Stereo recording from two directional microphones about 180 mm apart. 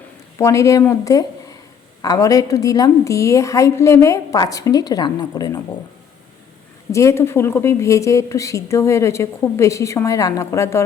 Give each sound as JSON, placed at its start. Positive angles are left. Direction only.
{"t": 0.3, "sound": "a woman's voice", "side_deg": 15}
{"t": 6.9, "sound": "a woman's voice", "side_deg": 15}